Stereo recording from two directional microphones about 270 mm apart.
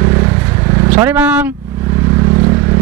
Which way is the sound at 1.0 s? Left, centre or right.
Centre.